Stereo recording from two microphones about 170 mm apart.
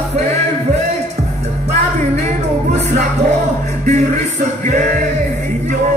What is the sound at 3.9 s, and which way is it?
Music, 45° right (ahead or behind).